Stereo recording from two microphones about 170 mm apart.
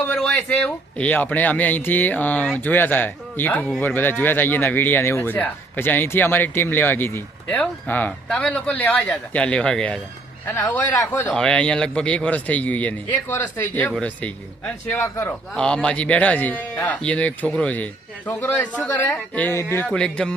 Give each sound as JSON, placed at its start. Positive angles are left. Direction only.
{"t": 0.0, "sound": "speech", "side_deg": 5}
{"t": 11.3, "sound": "a man's voice", "side_deg": 5}